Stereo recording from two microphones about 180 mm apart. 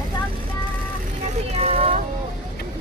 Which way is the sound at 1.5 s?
35° right (ahead or behind).